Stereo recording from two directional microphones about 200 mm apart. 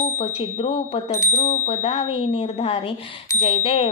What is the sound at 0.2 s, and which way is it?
Speech, 30° left (ahead or behind).